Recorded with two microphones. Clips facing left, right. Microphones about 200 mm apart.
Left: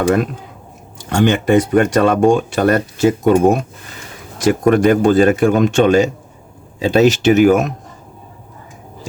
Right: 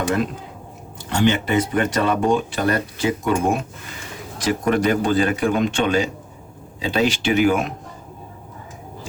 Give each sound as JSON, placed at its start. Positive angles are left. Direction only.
{"t": 1.1, "sound": "speech", "side_deg": 45}